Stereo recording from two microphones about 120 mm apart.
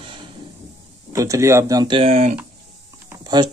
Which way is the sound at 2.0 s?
65° right (ahead or behind).